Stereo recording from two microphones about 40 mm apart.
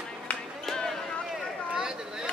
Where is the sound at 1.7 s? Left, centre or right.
Centre.